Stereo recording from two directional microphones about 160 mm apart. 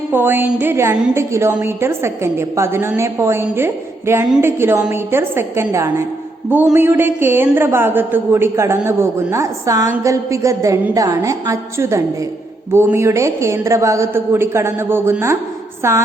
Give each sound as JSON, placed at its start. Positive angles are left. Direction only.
{"t": 0.1, "sound": "a woman's voice", "side_deg": -15}